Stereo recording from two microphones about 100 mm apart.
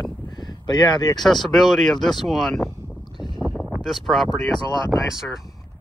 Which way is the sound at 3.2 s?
50° left (ahead or behind).